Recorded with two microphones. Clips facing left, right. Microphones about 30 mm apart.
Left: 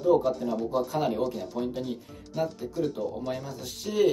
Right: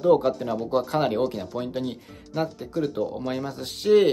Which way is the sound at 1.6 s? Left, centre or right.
Right.